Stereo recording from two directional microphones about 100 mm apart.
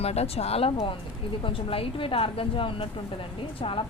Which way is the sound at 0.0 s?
90° left.